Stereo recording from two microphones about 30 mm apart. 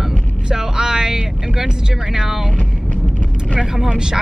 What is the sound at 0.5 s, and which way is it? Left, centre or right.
Vehicle, right.